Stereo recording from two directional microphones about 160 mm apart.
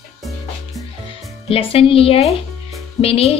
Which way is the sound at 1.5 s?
35° left (ahead or behind).